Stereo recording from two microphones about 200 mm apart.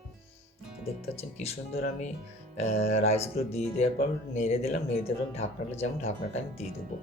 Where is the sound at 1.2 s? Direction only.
30° left (ahead or behind).